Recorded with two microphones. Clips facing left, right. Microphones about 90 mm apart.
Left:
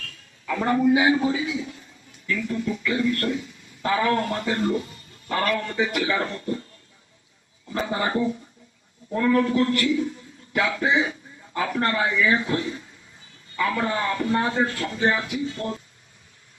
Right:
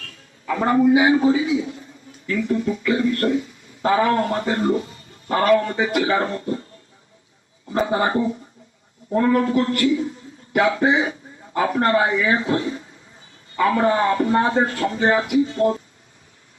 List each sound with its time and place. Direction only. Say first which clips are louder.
0.0 s a man's voice: right 2 dB; 35° right (ahead or behind)
7.7 s a man's voice: right 5 dB; 30° right (ahead or behind)